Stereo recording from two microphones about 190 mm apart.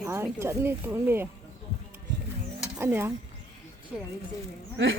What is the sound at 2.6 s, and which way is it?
Stir, 10° right (ahead or behind).